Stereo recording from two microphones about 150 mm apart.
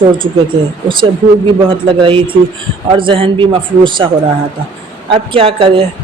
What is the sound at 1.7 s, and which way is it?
A man's voice, 35° right (ahead or behind).